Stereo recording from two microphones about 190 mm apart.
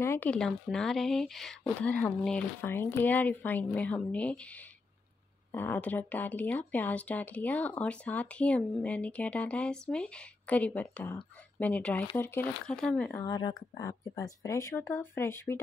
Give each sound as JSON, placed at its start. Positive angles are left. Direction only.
{"t": 0.0, "sound": "speech", "side_deg": 10}
{"t": 13.2, "sound": "speech", "side_deg": 20}